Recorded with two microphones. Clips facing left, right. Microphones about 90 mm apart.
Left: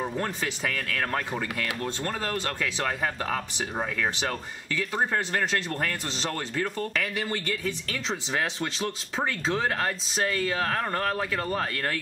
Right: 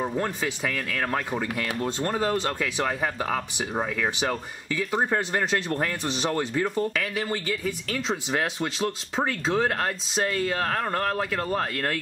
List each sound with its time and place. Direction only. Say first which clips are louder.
0.0 s speech: right 3 dB; 10° right (ahead or behind)
1.6 s speech: right 3 dB; 20° right (ahead or behind)
2.6 s speech: right 2 dB; 5° right (ahead or behind)
7.0 s speech: right 1 dB; 5° right (ahead or behind)